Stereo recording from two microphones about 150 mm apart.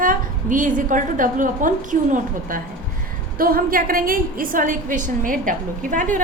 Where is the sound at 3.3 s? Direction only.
75° right (ahead or behind).